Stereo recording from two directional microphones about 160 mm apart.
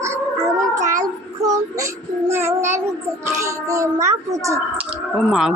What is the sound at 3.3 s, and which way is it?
A woman's voice, 20° right (ahead or behind).